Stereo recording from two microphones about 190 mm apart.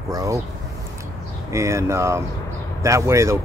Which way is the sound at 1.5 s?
15° right (ahead or behind).